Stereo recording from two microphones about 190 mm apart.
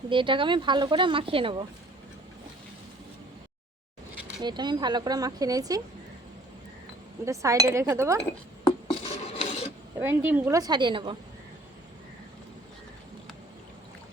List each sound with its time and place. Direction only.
0.1 s a woman's voice: 25° right (ahead or behind)
4.4 s a woman's voice: 25° right (ahead or behind)
7.3 s speech: 15° right (ahead or behind)
8.6 s filing: 30° left (ahead or behind)
10.0 s a woman's voice: 10° right (ahead or behind); by 11.2 s 25° right (ahead or behind)